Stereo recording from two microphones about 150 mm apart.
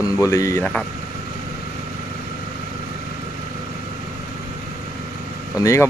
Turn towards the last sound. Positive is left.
turn(degrees=20)  # may be behind; listen again after turning